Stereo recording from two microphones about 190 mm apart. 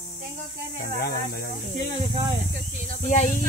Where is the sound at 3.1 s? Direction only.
45° left (ahead or behind).